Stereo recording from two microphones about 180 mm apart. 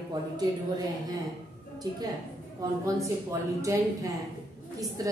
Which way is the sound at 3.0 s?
15° right (ahead or behind).